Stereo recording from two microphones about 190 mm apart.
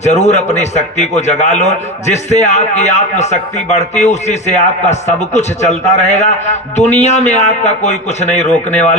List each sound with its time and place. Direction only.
0.0 s a man's voice: 35° left (ahead or behind)